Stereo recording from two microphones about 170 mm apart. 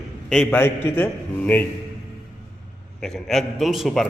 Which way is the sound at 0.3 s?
10° left (ahead or behind).